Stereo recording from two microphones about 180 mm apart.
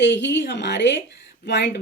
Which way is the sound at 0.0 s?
75° left (ahead or behind).